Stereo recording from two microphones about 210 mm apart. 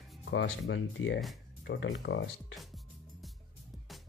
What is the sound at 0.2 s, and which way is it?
Speech, 55° left (ahead or behind).